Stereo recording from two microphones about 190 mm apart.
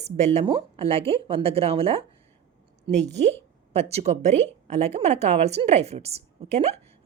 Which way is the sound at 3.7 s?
35° right (ahead or behind).